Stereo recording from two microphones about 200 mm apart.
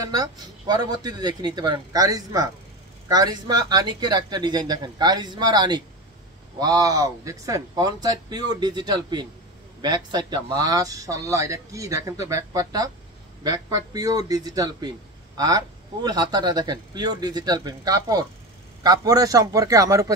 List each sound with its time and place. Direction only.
0.0 s a man's voice: 20° right (ahead or behind)